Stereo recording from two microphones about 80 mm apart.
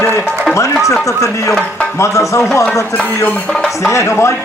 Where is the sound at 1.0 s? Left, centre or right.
Left.